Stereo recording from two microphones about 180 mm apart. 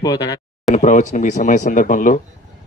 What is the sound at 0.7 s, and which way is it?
Speech, 40° left (ahead or behind).